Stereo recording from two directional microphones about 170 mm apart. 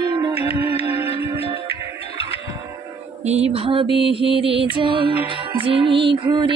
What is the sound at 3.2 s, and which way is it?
Music, 40° right (ahead or behind).